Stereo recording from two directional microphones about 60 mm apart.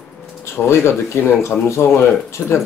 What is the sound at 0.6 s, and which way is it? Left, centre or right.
Speech, left.